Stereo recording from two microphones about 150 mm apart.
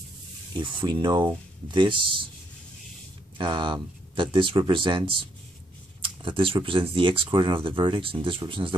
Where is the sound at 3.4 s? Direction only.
30° right (ahead or behind).